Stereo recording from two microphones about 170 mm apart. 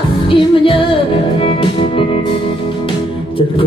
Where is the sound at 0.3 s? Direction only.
30° left (ahead or behind).